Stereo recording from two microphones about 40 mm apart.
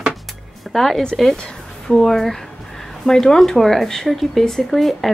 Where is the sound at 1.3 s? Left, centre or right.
Centre.